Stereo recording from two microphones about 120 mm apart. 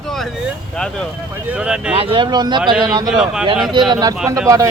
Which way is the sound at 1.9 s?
50° right (ahead or behind).